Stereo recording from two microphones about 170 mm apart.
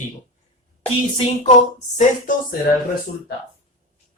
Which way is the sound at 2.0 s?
50° left (ahead or behind).